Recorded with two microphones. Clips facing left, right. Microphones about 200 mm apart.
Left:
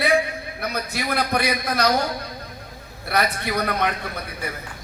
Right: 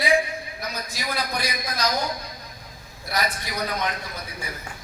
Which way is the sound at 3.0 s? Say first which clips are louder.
Left 5 dB; 60° left (ahead or behind).